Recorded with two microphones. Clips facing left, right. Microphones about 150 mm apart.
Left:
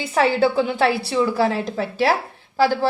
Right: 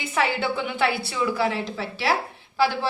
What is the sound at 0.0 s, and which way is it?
A woman's voice, 40° left (ahead or behind).